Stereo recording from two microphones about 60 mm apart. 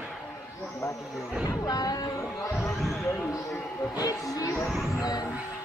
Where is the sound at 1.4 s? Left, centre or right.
Left.